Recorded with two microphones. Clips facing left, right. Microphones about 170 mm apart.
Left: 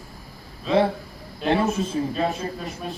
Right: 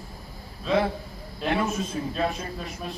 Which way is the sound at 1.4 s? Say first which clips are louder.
Left 4 dB; 30° left (ahead or behind).